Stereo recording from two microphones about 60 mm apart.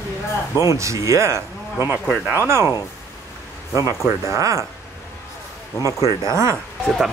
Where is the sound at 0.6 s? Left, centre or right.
Right.